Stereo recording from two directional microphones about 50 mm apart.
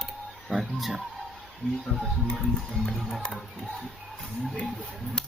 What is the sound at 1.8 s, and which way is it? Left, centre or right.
Music, centre.